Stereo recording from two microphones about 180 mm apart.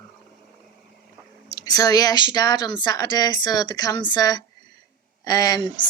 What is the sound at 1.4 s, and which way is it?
Speech, 20° left (ahead or behind).